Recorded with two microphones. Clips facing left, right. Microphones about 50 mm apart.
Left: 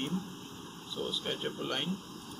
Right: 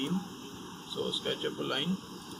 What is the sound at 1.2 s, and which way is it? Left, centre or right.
Speech, centre.